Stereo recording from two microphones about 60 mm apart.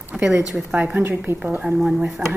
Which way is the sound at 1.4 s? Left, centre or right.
Centre.